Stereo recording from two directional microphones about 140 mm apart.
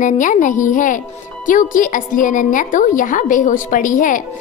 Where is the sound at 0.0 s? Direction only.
65° left (ahead or behind).